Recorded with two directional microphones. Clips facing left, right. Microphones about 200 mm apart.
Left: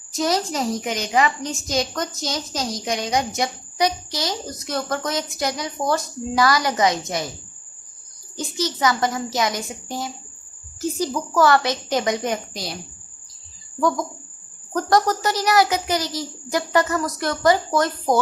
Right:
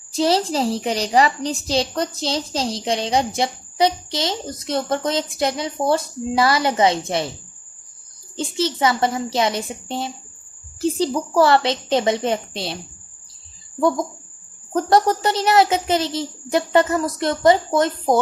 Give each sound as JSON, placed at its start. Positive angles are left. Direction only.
{"t": 0.1, "sound": "a woman's voice", "side_deg": -30}
{"t": 8.4, "sound": "a woman's voice", "side_deg": -25}
{"t": 13.7, "sound": "a woman's voice", "side_deg": -25}